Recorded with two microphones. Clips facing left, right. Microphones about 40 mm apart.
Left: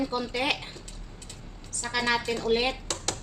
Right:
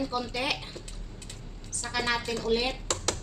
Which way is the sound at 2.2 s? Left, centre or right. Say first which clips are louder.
Left 2 dB; left.